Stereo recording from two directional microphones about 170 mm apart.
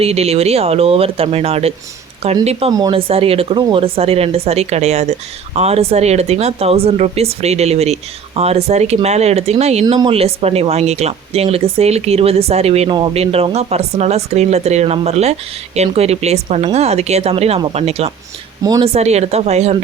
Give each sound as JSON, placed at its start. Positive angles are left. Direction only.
{"t": 0.0, "sound": "speech", "side_deg": -40}
{"t": 18.6, "sound": "speech", "side_deg": -20}
{"t": 18.9, "sound": "speech", "side_deg": -40}